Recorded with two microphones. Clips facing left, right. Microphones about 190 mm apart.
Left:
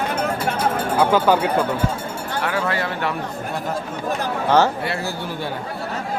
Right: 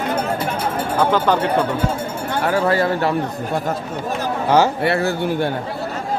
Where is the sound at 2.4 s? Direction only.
40° right (ahead or behind).